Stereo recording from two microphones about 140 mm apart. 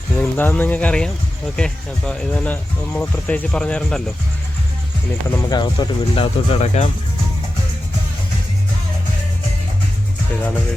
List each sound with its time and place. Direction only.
0.2 s speech: 10° left (ahead or behind)
5.4 s speech: 30° left (ahead or behind); by 6.9 s 50° left (ahead or behind)